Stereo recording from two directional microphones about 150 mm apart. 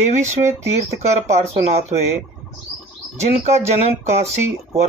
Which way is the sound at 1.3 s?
50° right (ahead or behind).